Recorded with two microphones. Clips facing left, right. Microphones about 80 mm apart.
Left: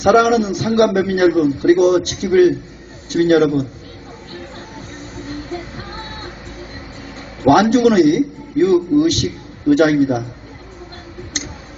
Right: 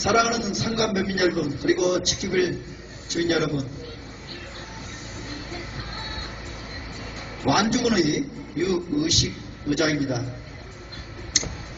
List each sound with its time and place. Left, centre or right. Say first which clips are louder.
0.0 s a man's voice: left 9 dB; left
7.4 s a man's voice: left 10 dB; left
11.3 s tick: left 3 dB; left